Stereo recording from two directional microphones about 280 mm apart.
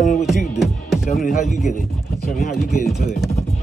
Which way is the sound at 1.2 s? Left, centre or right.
Left.